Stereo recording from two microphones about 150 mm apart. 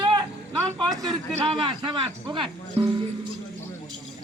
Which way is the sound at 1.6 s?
35° right (ahead or behind).